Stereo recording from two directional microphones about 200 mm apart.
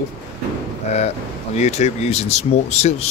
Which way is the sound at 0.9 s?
35° left (ahead or behind).